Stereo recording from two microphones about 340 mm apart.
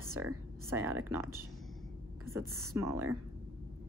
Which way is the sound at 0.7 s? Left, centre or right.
Centre.